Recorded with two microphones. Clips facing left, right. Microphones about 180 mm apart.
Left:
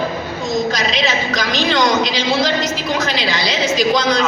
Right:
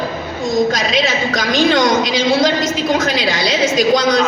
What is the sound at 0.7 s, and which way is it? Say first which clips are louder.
A woman's voice: right 2 dB; 50° right (ahead or behind).